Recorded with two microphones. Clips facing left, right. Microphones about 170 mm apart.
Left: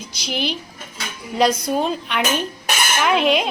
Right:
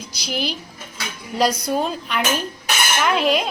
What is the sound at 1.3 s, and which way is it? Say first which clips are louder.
A woman's voice: left 2 dB; centre (ahead or behind).